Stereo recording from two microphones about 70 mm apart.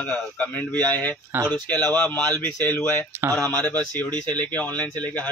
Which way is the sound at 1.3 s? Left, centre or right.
Right.